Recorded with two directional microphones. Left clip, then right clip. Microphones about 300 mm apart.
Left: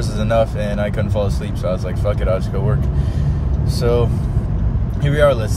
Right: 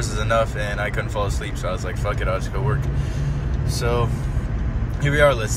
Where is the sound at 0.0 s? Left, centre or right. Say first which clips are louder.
Left 3 dB; centre.